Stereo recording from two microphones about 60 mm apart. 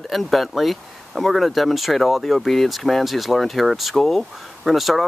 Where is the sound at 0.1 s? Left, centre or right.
Centre.